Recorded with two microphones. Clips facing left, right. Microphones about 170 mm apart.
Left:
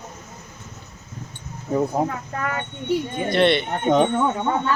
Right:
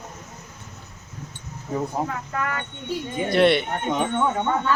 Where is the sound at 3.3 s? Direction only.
10° right (ahead or behind).